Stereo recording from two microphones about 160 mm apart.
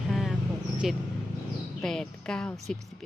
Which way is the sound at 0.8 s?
5° right (ahead or behind).